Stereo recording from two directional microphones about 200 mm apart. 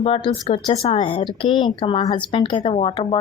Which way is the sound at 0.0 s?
30° left (ahead or behind).